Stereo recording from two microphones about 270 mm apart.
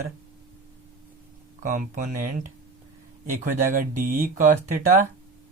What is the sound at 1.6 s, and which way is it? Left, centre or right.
Speech, right.